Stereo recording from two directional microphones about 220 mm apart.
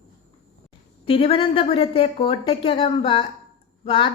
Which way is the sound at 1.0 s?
25° left (ahead or behind).